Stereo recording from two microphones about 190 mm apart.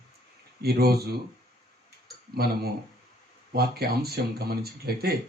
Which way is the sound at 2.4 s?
55° right (ahead or behind).